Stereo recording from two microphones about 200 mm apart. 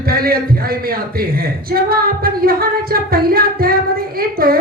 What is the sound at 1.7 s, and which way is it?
A woman's voice, 50° right (ahead or behind).